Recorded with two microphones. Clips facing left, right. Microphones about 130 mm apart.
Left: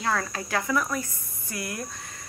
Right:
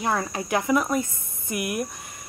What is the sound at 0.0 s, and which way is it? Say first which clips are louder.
A woman's voice: right 2 dB; 20° right (ahead or behind).